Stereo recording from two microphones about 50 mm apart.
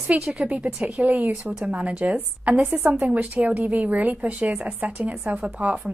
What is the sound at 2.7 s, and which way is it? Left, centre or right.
Speech, right.